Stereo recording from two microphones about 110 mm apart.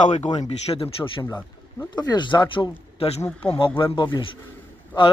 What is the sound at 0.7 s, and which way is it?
Speech, 30° left (ahead or behind).